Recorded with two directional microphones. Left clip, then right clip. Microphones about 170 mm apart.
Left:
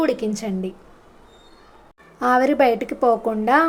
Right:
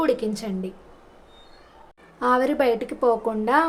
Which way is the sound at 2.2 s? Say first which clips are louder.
Left 4 dB; 20° left (ahead or behind).